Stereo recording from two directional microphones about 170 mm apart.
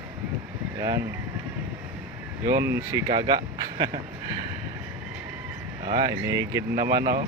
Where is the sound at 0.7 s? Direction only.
25° right (ahead or behind).